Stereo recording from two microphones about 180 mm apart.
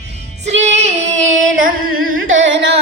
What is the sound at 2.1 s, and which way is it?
Carnatic music, 90° right.